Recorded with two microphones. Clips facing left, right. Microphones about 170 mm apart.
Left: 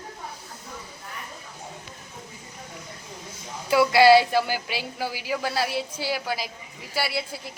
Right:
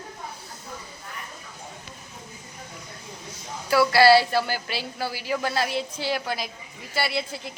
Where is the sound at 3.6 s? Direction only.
20° left (ahead or behind).